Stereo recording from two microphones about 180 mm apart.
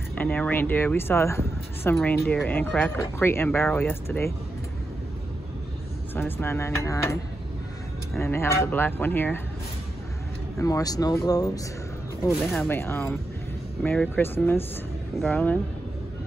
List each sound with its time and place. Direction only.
0.1 s speech: 10° left (ahead or behind)
6.1 s speech: 10° left (ahead or behind)
8.2 s speech: 15° left (ahead or behind)
10.6 s speech: 20° left (ahead or behind)
12.3 s speech: 10° left (ahead or behind)